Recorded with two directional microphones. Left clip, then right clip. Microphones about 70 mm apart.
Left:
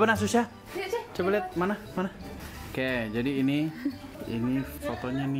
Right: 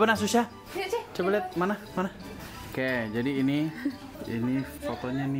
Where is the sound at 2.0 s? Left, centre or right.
Right.